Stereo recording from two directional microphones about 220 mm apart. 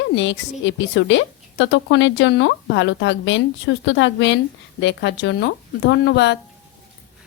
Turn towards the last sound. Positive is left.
turn(degrees=50)  # may be behind; listen again after turning